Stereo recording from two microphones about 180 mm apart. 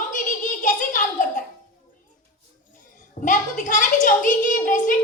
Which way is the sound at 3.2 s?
45° left (ahead or behind).